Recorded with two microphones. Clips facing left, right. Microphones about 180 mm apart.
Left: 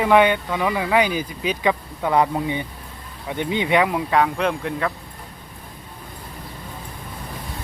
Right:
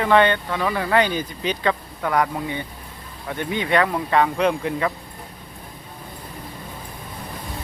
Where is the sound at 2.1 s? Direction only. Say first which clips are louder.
Left 3 dB; 25° left (ahead or behind); by 4.9 s centre (ahead or behind).